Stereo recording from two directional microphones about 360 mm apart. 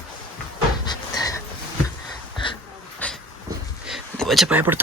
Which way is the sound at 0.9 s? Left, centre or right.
Centre.